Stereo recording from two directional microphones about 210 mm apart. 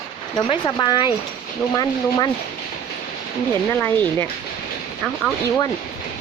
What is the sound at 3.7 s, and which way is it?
Speech, 10° left (ahead or behind).